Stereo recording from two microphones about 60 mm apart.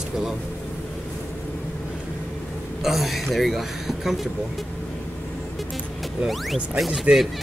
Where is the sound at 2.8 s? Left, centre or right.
Centre.